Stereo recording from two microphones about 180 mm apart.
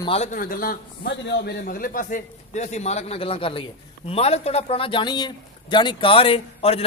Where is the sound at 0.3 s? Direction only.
50° left (ahead or behind).